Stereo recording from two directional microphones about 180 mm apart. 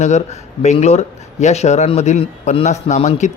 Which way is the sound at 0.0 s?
40° left (ahead or behind).